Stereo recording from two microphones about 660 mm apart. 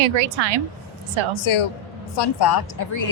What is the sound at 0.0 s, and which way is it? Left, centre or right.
Speech, right.